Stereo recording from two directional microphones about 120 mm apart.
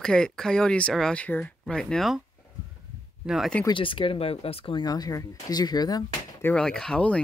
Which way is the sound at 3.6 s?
45° left (ahead or behind).